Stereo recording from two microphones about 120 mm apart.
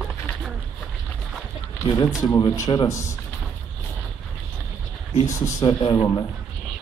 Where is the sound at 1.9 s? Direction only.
30° left (ahead or behind).